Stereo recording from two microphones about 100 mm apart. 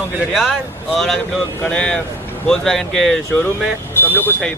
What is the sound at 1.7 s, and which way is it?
Speech, 10° left (ahead or behind).